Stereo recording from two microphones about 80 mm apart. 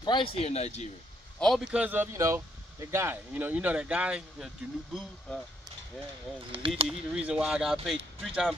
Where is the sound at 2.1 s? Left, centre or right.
Right; by 5.0 s centre.